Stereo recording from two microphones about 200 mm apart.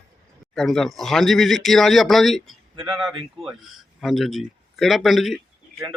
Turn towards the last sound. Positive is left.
turn(degrees=0)  # may be behind; listen again after turning